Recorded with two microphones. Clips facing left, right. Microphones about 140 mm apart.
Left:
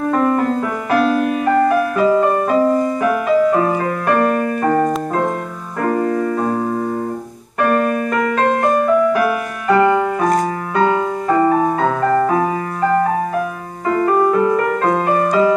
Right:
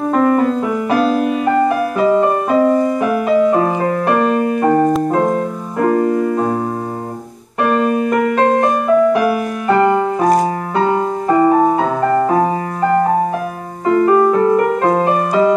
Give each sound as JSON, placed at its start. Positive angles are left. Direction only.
{"t": 0.1, "sound": "music", "side_deg": -5}
{"t": 6.1, "sound": "music", "side_deg": -10}
{"t": 7.7, "sound": "music", "side_deg": -20}
{"t": 9.8, "sound": "music", "side_deg": -30}
{"t": 11.3, "sound": "music", "side_deg": -15}
{"t": 13.8, "sound": "music", "side_deg": -5}
{"t": 14.3, "sound": "music", "side_deg": -30}
{"t": 14.6, "sound": "music", "side_deg": -15}